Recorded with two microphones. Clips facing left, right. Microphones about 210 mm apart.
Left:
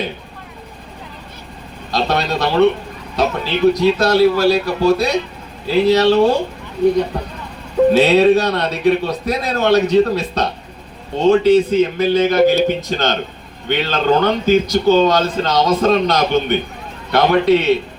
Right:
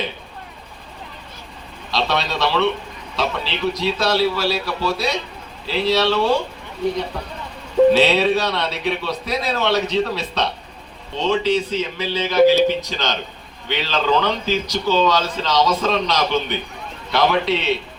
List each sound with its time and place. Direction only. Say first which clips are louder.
1.9 s a man's voice: left 4 dB; 50° left (ahead or behind)
7.9 s a man's voice: left 5 dB; 45° left (ahead or behind)